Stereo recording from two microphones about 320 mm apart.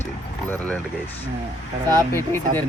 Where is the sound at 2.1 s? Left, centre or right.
Centre.